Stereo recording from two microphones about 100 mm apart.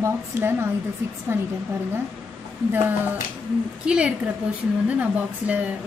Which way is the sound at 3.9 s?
10° right (ahead or behind).